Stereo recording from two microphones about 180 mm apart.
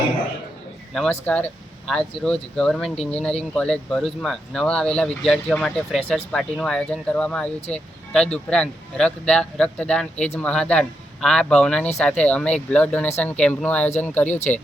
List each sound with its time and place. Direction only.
0.9 s speech: 5° left (ahead or behind)
14.3 s speech: 40° left (ahead or behind)